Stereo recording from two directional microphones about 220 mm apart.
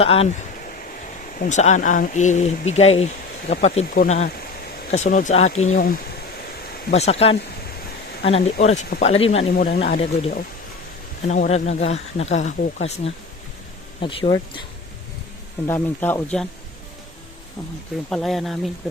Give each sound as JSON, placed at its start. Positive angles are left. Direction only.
{"t": 0.0, "sound": "speech", "side_deg": 25}
{"t": 15.6, "sound": "speech", "side_deg": 10}
{"t": 18.1, "sound": "speech", "side_deg": 0}